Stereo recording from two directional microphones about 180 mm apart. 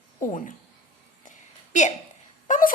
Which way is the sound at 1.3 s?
45° left (ahead or behind).